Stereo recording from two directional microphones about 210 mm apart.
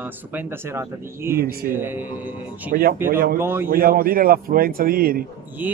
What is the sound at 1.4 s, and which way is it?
Speech, 45° right (ahead or behind).